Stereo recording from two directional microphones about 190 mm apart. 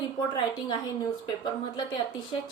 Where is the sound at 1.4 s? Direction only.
25° left (ahead or behind).